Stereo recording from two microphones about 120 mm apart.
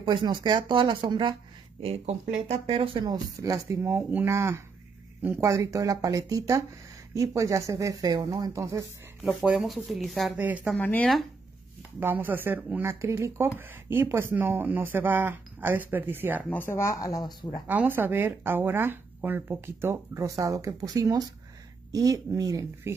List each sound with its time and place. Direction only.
0.0 s speech: 40° right (ahead or behind)
1.8 s speech: 60° right (ahead or behind)
3.1 s speech: 30° right (ahead or behind)
9.2 s speech: 10° right (ahead or behind)
10.3 s speech: 15° right (ahead or behind)
10.8 s speech: 10° left (ahead or behind)
12.0 s speech: 15° right (ahead or behind)
16.4 s speech: 20° left (ahead or behind)
17.6 s speech: 15° right (ahead or behind)